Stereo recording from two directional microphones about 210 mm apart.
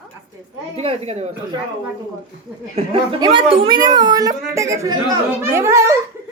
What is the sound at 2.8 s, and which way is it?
A man's voice, 30° right (ahead or behind).